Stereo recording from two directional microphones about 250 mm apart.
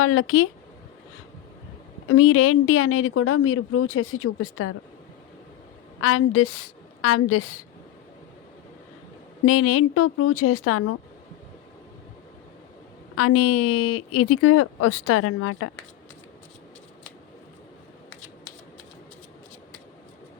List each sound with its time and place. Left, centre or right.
0.0 s a woman's voice: left
2.0 s a woman's voice: left
6.0 s a woman's voice: left
9.5 s a woman's voice: left
13.1 s a woman's voice: left